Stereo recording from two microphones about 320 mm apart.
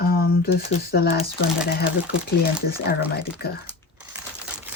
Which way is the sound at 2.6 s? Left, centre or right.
Centre.